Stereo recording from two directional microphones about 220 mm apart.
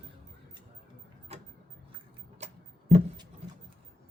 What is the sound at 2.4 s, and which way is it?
Music, 30° right (ahead or behind).